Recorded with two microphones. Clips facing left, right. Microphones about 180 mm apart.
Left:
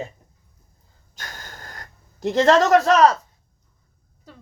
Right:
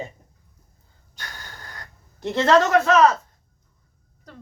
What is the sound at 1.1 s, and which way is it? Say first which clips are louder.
Gasp: left 1 dB; 45° left (ahead or behind).